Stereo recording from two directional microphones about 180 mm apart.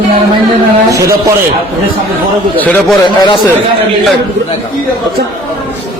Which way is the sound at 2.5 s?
10° left (ahead or behind).